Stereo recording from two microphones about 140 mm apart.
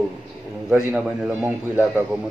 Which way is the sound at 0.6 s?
5° right (ahead or behind).